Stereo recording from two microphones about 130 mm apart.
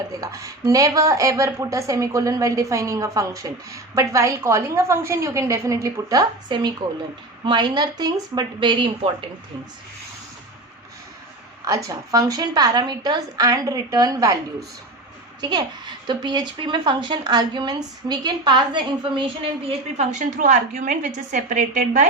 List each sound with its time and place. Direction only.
0.1 s a woman's voice: 25° right (ahead or behind)
11.6 s speech: 25° right (ahead or behind)
15.4 s a woman's voice: 35° right (ahead or behind)
19.6 s a woman's voice: 60° right (ahead or behind)